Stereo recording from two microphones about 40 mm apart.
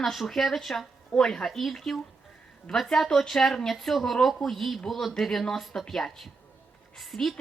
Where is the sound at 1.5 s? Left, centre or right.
Centre.